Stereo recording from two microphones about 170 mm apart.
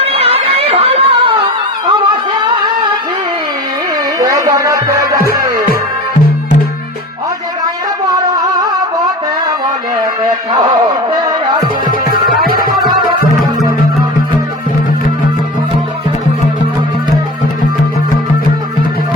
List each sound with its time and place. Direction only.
0.0 s music: 35° right (ahead or behind)
4.2 s music: 20° right (ahead or behind)
8.1 s music: 20° right (ahead or behind)
10.2 s a sound: 25° right (ahead or behind)
12.5 s music: 60° left (ahead or behind)